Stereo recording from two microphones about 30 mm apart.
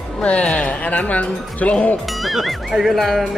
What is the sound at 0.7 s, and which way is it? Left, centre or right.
Speech, left.